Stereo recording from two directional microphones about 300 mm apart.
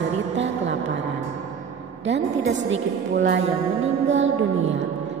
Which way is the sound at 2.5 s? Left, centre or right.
Right.